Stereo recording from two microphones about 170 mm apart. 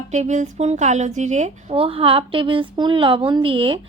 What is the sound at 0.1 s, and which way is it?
A woman's voice, 45° right (ahead or behind).